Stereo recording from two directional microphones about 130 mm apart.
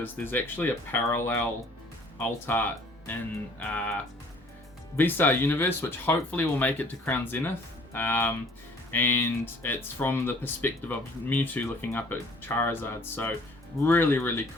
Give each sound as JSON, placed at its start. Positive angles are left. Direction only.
{"t": 0.0, "sound": "speech", "side_deg": 15}